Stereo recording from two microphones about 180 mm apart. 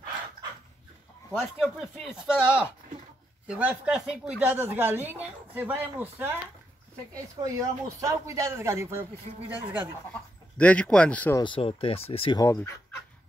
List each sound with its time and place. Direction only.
1.3 s speech: 5° right (ahead or behind)
10.6 s speech: 5° left (ahead or behind)
11.4 s speech: 30° left (ahead or behind)
12.4 s speech: 15° left (ahead or behind)